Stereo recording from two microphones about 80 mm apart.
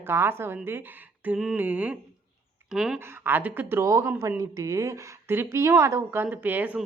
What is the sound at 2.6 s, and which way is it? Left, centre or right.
Speech, centre.